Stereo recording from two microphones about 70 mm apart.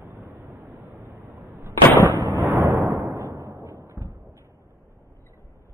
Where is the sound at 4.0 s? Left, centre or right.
Centre.